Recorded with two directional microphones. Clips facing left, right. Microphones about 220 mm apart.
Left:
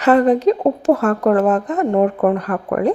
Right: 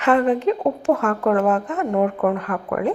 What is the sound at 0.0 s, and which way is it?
A woman's voice, 35° left (ahead or behind).